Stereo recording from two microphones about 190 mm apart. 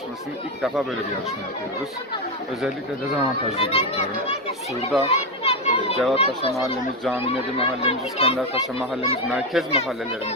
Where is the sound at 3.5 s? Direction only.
30° left (ahead or behind).